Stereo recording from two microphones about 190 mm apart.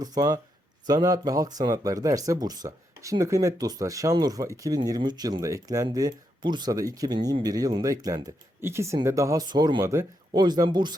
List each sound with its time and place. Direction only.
0.0 s speech: 20° right (ahead or behind)